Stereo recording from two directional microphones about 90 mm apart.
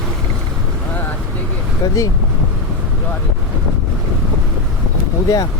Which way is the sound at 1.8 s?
45° left (ahead or behind).